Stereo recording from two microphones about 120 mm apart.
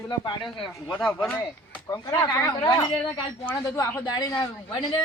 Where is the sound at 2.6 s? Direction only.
35° left (ahead or behind).